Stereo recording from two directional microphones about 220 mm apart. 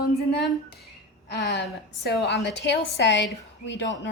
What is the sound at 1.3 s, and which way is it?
Speech, 50° left (ahead or behind).